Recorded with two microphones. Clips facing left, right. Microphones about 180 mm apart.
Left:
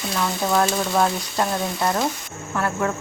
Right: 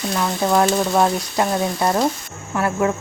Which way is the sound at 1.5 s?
20° right (ahead or behind).